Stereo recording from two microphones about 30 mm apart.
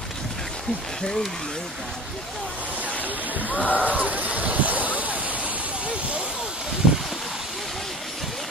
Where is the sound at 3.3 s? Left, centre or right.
Right.